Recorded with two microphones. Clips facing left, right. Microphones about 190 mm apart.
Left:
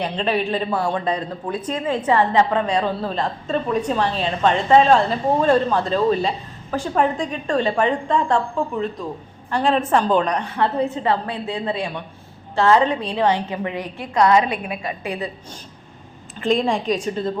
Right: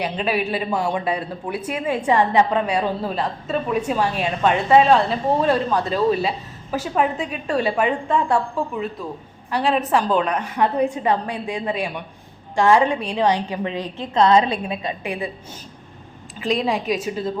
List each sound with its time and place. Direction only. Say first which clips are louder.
0.0 s a woman's voice: left 1 dB; 10° right (ahead or behind)
13.7 s a woman's voice: right 1 dB; 15° left (ahead or behind)
14.1 s a woman's voice: even; 25° right (ahead or behind)
15.0 s a woman's voice: left 2 dB; 15° right (ahead or behind)
16.4 s a woman's voice: left 2 dB; 5° right (ahead or behind)